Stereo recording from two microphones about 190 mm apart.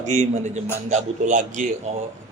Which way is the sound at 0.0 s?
40° right (ahead or behind).